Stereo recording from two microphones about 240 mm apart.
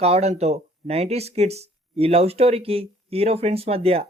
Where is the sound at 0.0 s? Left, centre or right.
Right.